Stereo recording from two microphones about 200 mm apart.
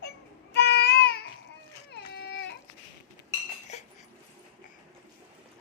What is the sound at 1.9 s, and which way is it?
Baby cry, 55° left (ahead or behind).